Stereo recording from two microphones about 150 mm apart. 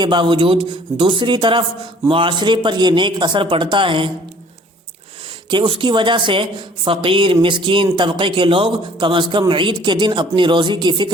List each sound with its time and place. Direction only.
0.0 s speech: 30° right (ahead or behind)
5.5 s speech: 35° right (ahead or behind)